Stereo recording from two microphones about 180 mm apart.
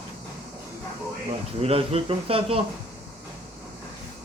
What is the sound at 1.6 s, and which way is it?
Speech, 35° right (ahead or behind).